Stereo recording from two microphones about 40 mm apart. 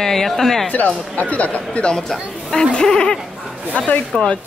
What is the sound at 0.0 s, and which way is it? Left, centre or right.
Speech, centre.